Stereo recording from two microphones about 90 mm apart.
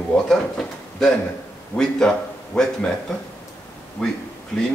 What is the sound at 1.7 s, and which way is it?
Speech, 20° left (ahead or behind).